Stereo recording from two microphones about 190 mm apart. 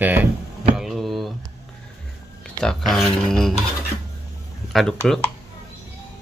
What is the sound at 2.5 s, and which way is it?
Speech, centre (ahead or behind).